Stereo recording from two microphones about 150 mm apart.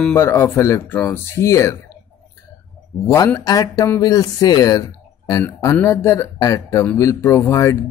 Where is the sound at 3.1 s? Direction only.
20° left (ahead or behind).